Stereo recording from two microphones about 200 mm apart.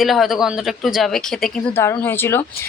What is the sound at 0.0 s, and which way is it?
Speech, centre (ahead or behind).